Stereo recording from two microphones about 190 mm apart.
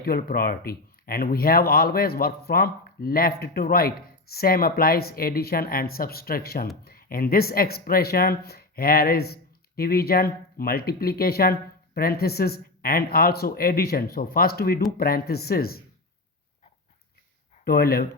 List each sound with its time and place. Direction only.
0.0 s speech: 50° left (ahead or behind)
17.7 s speech: 55° left (ahead or behind)